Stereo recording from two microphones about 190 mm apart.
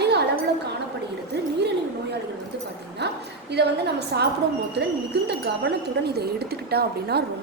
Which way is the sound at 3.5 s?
60° right (ahead or behind).